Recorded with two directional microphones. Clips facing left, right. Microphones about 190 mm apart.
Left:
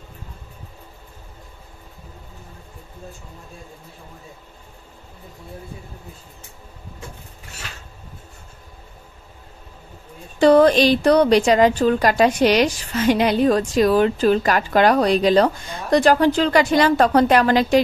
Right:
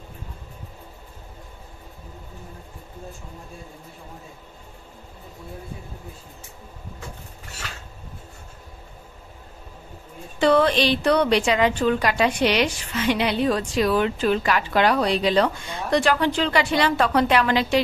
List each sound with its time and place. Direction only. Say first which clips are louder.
10.4 s a woman's voice: left 6 dB; 40° left (ahead or behind)